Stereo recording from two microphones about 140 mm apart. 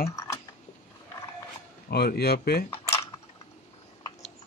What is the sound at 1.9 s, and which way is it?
Speech, 90° left.